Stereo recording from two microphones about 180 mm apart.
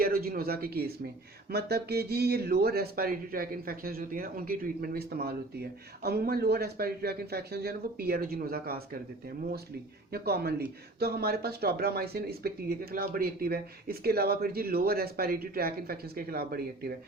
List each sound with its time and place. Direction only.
0.0 s speech: 60° right (ahead or behind)
10.1 s speech: 60° right (ahead or behind)